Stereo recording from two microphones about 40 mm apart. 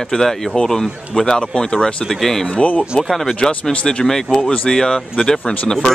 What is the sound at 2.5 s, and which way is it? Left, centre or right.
Speech, left.